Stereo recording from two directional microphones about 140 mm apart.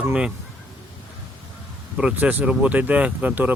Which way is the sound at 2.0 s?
10° right (ahead or behind).